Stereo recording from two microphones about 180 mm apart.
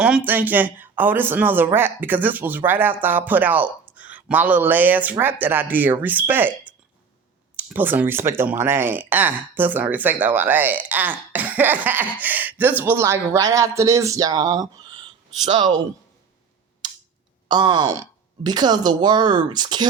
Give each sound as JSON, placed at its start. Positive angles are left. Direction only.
{"t": 0.0, "sound": "speech", "side_deg": -10}
{"t": 16.8, "sound": "a sound", "side_deg": -25}
{"t": 17.5, "sound": "speech", "side_deg": -25}